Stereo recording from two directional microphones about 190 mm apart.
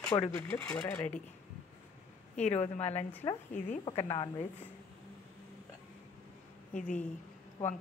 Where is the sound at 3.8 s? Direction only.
25° left (ahead or behind).